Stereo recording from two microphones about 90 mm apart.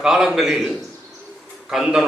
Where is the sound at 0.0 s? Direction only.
5° right (ahead or behind).